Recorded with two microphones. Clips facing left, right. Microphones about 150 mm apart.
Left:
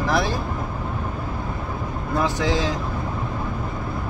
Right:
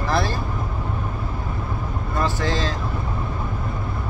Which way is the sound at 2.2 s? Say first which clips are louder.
Left 2 dB; 15° left (ahead or behind).